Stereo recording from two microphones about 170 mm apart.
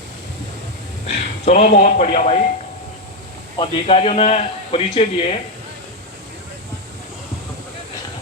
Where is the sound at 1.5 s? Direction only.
45° left (ahead or behind).